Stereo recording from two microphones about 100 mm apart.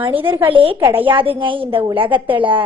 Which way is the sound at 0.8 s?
25° right (ahead or behind).